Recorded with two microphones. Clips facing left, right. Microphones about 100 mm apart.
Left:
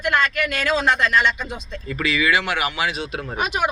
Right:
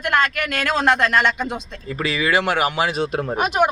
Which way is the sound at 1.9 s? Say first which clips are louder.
Even; 35° right (ahead or behind).